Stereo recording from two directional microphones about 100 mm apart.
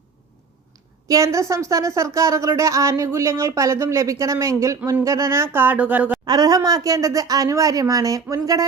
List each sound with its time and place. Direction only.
1.0 s speech: 35° right (ahead or behind); by 6.1 s 15° right (ahead or behind)
6.2 s speech: 40° right (ahead or behind)